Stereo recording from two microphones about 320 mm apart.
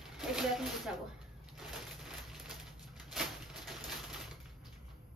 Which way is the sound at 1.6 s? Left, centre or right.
Centre.